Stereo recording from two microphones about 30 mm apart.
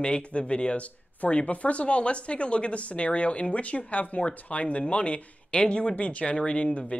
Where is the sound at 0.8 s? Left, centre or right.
Left.